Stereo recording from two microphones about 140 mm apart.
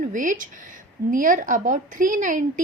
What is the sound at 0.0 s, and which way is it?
A woman's voice, 70° right (ahead or behind).